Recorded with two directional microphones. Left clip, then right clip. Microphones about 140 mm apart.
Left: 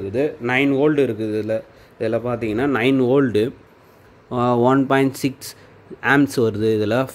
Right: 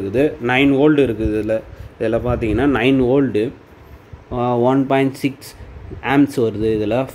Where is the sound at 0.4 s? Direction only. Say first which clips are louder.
Right 2 dB; 10° left (ahead or behind).